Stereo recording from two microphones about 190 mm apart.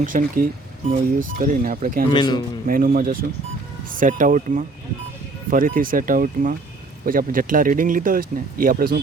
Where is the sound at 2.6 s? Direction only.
50° right (ahead or behind).